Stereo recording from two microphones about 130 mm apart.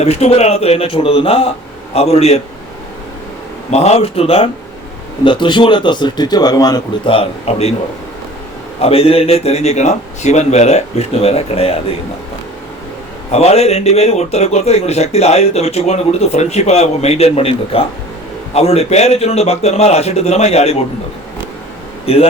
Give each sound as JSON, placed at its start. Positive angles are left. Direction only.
{"t": 0.0, "sound": "speech", "side_deg": 55}
{"t": 3.7, "sound": "speech", "side_deg": 55}
{"t": 5.2, "sound": "a man's voice", "side_deg": 40}
{"t": 7.1, "sound": "speech", "side_deg": 50}
{"t": 8.8, "sound": "speech", "side_deg": 50}
{"t": 13.3, "sound": "speech", "side_deg": 55}
{"t": 22.0, "sound": "a man's voice", "side_deg": 50}